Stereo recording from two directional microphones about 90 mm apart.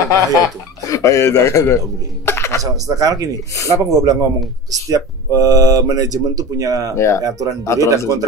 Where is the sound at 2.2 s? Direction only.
30° left (ahead or behind).